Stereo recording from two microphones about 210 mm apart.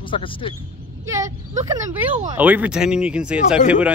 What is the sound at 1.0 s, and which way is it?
Speech, 15° right (ahead or behind).